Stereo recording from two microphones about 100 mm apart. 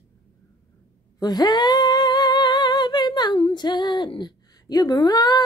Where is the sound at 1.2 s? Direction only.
45° left (ahead or behind).